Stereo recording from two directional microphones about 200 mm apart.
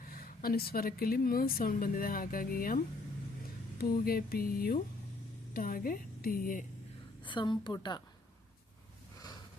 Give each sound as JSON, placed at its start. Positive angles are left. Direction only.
{"t": 0.1, "sound": "a woman's voice", "side_deg": 45}
{"t": 7.3, "sound": "a woman's voice", "side_deg": 25}